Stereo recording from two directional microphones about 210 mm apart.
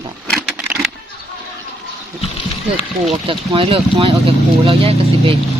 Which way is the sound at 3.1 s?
25° right (ahead or behind).